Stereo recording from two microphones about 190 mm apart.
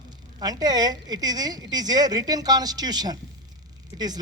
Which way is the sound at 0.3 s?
20° right (ahead or behind).